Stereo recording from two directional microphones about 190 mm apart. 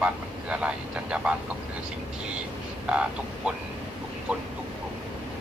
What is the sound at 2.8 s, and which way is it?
Speech, 5° right (ahead or behind).